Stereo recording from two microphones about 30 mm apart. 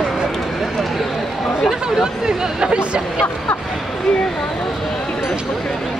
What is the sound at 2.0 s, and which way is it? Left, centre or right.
Speech, right.